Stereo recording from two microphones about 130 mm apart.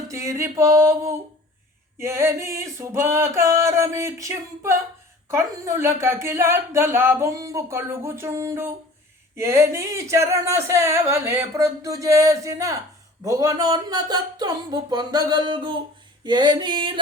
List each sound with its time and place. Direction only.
0.1 s speech: 20° right (ahead or behind); by 17.0 s 40° right (ahead or behind)